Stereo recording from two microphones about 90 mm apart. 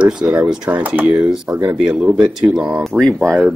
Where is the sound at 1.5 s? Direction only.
25° right (ahead or behind).